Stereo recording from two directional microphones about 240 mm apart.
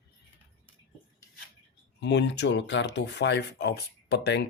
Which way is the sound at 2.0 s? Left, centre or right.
Left.